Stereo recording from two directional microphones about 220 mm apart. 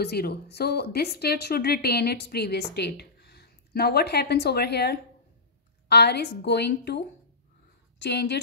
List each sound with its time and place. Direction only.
0.0 s a woman's voice: 45° left (ahead or behind)